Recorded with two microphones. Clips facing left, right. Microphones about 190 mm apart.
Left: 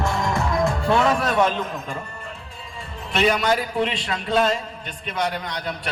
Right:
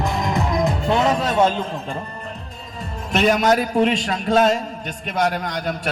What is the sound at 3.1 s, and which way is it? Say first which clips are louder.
A man's voice: right 3 dB; 45° right (ahead or behind).